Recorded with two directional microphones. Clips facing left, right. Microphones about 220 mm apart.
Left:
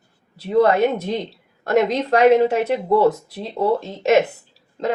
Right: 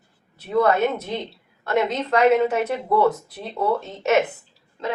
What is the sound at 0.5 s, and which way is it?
Speech, 35° left (ahead or behind).